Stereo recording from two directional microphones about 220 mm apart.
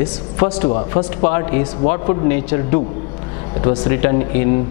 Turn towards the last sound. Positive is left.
turn(degrees=15)  # may be behind; listen again after turning